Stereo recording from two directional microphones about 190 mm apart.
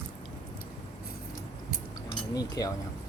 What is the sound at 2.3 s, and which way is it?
Chink, 20° left (ahead or behind).